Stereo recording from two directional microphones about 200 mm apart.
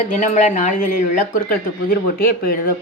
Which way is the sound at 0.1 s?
35° left (ahead or behind).